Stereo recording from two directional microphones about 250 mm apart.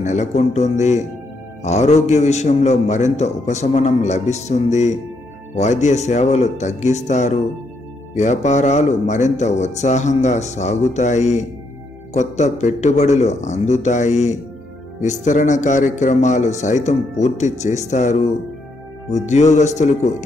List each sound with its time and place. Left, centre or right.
0.0 s a man's voice: left